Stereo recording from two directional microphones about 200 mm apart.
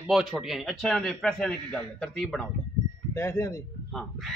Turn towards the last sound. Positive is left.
turn(degrees=15)  # may be behind; listen again after turning